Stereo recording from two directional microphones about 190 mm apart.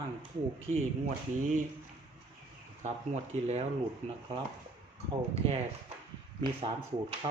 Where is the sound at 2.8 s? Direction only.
35° right (ahead or behind).